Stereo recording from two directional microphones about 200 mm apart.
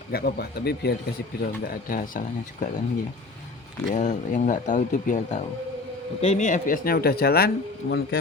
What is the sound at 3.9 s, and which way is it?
Speech, 40° left (ahead or behind).